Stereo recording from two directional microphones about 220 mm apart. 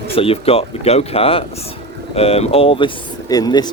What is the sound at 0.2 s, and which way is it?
Speech, 25° left (ahead or behind).